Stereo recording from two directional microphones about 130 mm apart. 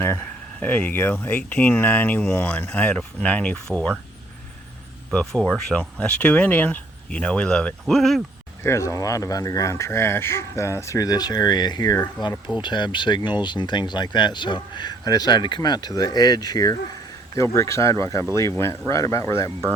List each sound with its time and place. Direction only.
0.0 s speech: 15° left (ahead or behind)
5.3 s speech: 5° left (ahead or behind)
8.6 s speech: 25° left (ahead or behind)
12.6 s speech: 35° left (ahead or behind)